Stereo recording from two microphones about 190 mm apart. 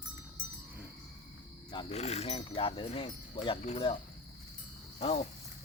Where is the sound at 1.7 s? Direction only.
30° left (ahead or behind).